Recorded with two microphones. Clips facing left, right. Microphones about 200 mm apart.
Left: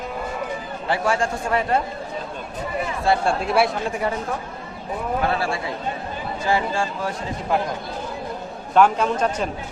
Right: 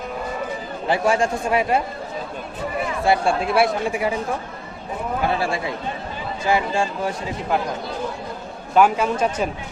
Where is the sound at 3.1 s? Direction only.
5° right (ahead or behind).